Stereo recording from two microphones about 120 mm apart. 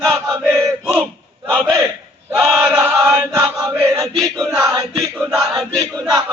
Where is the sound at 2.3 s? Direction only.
5° right (ahead or behind).